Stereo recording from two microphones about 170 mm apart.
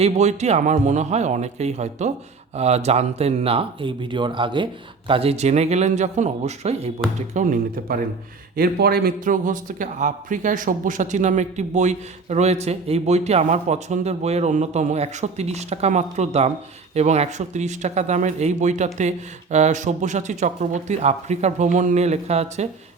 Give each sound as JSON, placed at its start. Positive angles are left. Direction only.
{"t": 0.0, "sound": "speech", "side_deg": -40}
{"t": 7.3, "sound": "speech", "side_deg": -50}
{"t": 8.5, "sound": "speech", "side_deg": -60}